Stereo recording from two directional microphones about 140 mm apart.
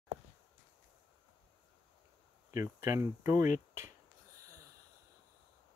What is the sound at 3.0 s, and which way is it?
Speech, 20° right (ahead or behind).